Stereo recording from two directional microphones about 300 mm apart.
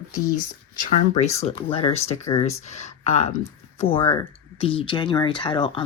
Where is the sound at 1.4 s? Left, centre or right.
Centre.